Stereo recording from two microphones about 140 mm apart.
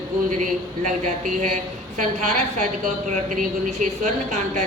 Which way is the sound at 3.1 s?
65° right (ahead or behind).